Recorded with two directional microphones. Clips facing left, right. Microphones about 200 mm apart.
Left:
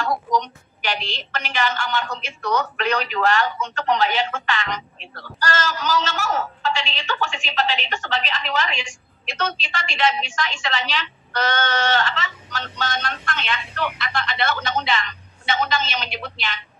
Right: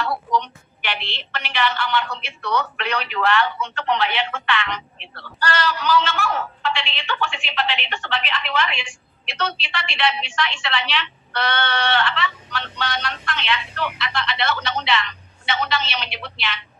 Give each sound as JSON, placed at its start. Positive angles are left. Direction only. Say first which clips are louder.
{"t": 0.0, "sound": "a woman's voice", "louder": "left 1 dB", "side_deg": 45}